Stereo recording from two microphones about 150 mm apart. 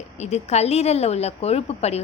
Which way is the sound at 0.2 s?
45° left (ahead or behind).